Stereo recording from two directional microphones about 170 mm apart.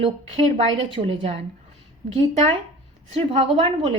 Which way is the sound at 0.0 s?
35° right (ahead or behind).